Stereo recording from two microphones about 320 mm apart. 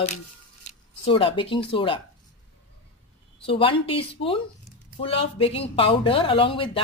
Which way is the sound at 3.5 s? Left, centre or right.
Centre.